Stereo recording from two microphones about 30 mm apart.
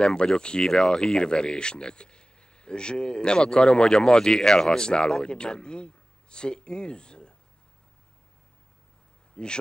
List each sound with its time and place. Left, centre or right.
0.0 s speech: left
9.3 s speech: left